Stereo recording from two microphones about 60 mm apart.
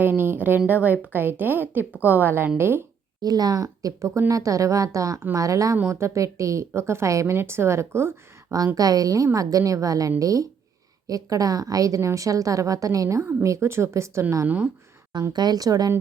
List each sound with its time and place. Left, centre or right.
0.0 s a woman's voice: right
3.2 s a woman's voice: right
5.9 s a woman's voice: right
7.3 s speech: right
8.5 s a woman's voice: right
13.2 s speech: right
14.4 s speech: right
15.5 s a woman's voice: right